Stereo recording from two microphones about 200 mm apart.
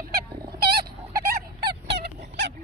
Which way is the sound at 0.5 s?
50° right (ahead or behind).